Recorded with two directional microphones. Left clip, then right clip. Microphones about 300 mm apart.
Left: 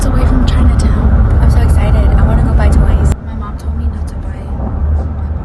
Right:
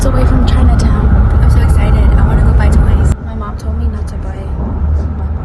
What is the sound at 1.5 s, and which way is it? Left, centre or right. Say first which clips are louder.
Vehicle: even; centre.